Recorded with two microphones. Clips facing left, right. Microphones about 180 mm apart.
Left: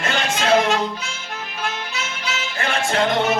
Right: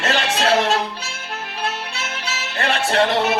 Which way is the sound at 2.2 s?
35° right (ahead or behind).